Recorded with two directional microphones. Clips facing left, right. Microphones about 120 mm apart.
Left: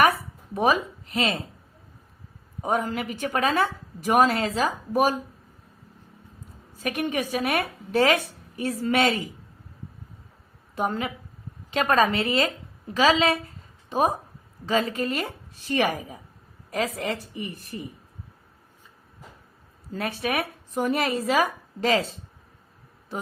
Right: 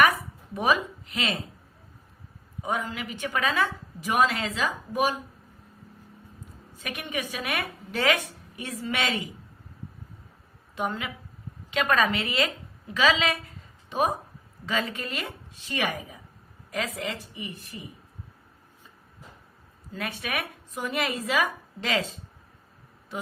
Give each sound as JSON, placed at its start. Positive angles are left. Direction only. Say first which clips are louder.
{"t": 0.5, "sound": "a woman's voice", "louder": "left 3 dB", "side_deg": 35}
{"t": 2.6, "sound": "a woman's voice", "louder": "left 5 dB", "side_deg": 40}
{"t": 6.7, "sound": "a woman's voice", "louder": "left 7 dB", "side_deg": 40}
{"t": 10.8, "sound": "a woman's voice", "louder": "left 4 dB", "side_deg": 40}
{"t": 14.7, "sound": "a woman's voice", "louder": "left 6 dB", "side_deg": 35}
{"t": 19.9, "sound": "a woman's voice", "louder": "left 5 dB", "side_deg": 35}